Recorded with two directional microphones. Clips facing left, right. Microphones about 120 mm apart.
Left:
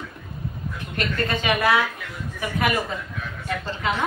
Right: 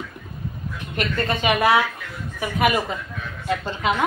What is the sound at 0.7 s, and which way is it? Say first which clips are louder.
A woman's voice: right 2 dB; 20° right (ahead or behind).